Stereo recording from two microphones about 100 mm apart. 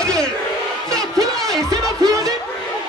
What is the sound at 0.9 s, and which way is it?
Music, 5° left (ahead or behind).